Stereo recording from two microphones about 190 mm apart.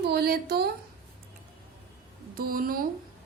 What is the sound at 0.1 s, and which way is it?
Speech, 55° right (ahead or behind).